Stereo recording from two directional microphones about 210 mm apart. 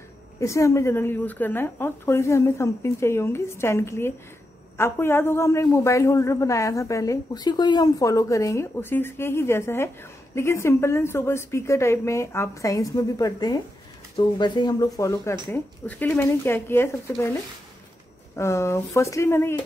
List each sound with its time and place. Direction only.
0.4 s a man's voice: 15° left (ahead or behind)